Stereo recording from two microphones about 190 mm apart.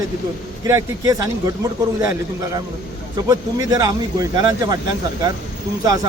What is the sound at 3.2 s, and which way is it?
Speech, 20° right (ahead or behind).